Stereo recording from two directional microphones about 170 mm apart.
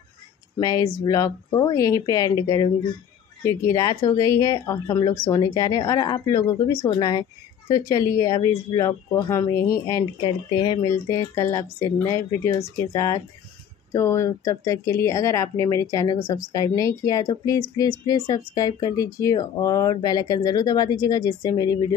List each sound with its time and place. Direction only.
0.6 s speech: 20° left (ahead or behind)